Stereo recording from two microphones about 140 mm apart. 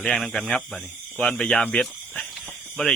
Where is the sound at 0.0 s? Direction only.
5° left (ahead or behind).